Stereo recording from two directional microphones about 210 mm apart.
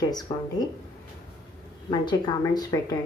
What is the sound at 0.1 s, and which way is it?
Speech, 20° left (ahead or behind).